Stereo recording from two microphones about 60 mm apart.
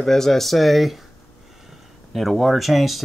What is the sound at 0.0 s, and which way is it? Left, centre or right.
Speech, centre.